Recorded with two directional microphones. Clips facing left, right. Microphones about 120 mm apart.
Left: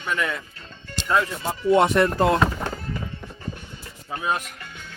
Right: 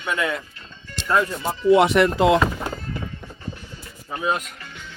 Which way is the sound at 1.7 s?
85° right.